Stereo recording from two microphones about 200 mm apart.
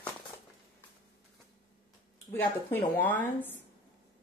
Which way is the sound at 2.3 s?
10° left (ahead or behind).